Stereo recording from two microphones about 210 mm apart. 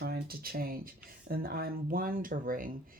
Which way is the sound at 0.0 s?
45° right (ahead or behind).